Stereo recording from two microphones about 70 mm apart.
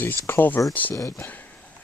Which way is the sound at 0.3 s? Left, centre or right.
Left.